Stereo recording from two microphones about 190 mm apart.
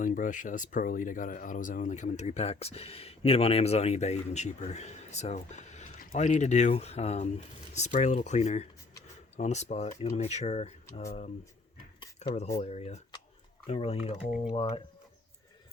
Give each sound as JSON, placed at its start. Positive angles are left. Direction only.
{"t": 0.0, "sound": "speech", "side_deg": 45}
{"t": 11.9, "sound": "cutlery", "side_deg": 30}
{"t": 12.5, "sound": "speech", "side_deg": 35}